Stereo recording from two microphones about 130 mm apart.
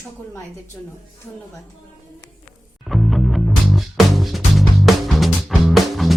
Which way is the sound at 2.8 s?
Centre (ahead or behind).